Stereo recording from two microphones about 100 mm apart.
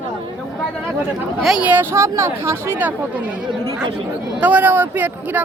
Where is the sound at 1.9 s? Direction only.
30° right (ahead or behind).